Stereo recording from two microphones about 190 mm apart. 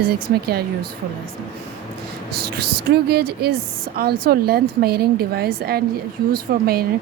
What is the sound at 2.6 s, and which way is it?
Speech, 55° right (ahead or behind).